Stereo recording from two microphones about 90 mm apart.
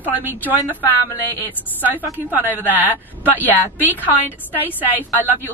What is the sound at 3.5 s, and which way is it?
A woman's voice, 20° left (ahead or behind).